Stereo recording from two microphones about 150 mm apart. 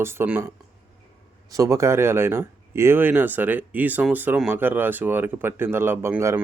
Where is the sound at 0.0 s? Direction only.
15° right (ahead or behind).